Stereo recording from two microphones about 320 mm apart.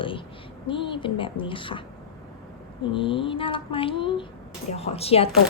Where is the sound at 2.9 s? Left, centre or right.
Centre.